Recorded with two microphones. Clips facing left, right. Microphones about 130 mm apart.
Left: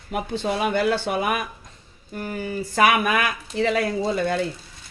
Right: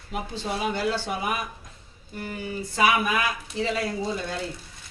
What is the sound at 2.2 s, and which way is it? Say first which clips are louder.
Speech: left 4 dB; 50° left (ahead or behind).